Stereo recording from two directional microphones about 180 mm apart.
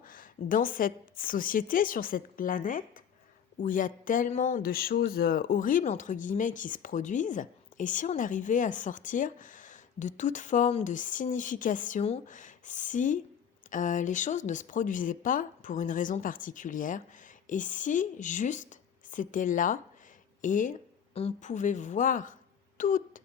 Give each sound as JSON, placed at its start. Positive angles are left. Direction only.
{"t": 0.0, "sound": "speech", "side_deg": 50}